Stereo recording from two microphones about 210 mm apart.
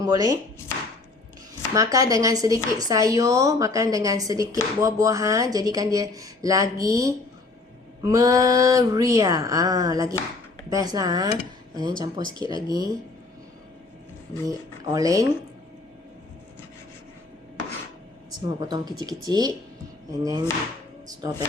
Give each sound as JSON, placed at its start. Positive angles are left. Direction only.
{"t": 0.0, "sound": "speech", "side_deg": -15}
{"t": 1.7, "sound": "speech", "side_deg": -15}
{"t": 14.4, "sound": "speech", "side_deg": -15}
{"t": 18.3, "sound": "speech", "side_deg": -20}